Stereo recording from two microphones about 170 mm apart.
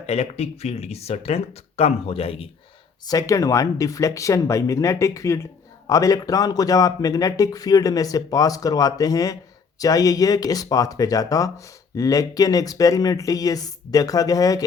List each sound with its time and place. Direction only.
0.0 s speech: 40° left (ahead or behind)
3.1 s speech: 20° left (ahead or behind)